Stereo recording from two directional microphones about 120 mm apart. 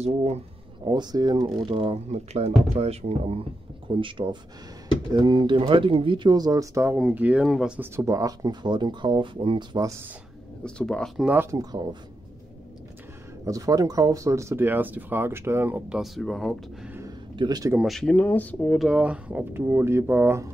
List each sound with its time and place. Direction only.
0.0 s speech: 60° right (ahead or behind)
0.8 s speech: 35° right (ahead or behind)
2.0 s speech: 65° right (ahead or behind)
4.0 s speech: 40° right (ahead or behind); by 7.0 s 25° right (ahead or behind)
7.0 s speech: 10° right (ahead or behind)
7.8 s speech: 20° right (ahead or behind); by 9.8 s 40° right (ahead or behind)
10.6 s speech: 10° left (ahead or behind)
11.5 s speech: 35° right (ahead or behind)
13.5 s speech: 30° right (ahead or behind)
16.0 s speech: centre (ahead or behind)
17.4 s speech: 35° right (ahead or behind)
17.7 s speech: centre (ahead or behind)
18.1 s speech: 15° left (ahead or behind)
18.7 s speech: 5° right (ahead or behind)